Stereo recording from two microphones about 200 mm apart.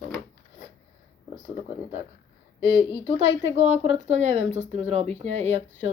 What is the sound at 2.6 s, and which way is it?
Speech, 55° left (ahead or behind).